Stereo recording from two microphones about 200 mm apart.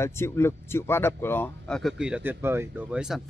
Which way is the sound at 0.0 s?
10° left (ahead or behind).